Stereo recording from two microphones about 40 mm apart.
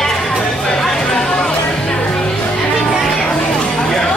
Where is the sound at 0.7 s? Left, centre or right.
Centre.